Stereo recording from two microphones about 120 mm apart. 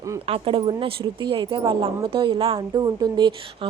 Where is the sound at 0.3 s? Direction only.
50° right (ahead or behind).